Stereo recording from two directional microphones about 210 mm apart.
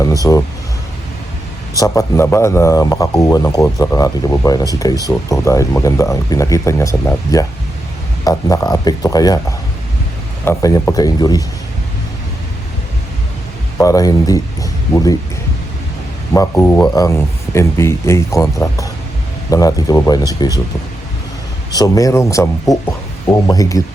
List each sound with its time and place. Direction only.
0.0 s speech: 15° left (ahead or behind)
1.8 s speech: 15° left (ahead or behind)
13.7 s speech: 15° left (ahead or behind)
16.3 s speech: 15° left (ahead or behind)
21.8 s speech: 15° left (ahead or behind)